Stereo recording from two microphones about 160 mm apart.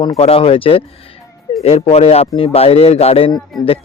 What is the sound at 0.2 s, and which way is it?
Speech, 35° left (ahead or behind).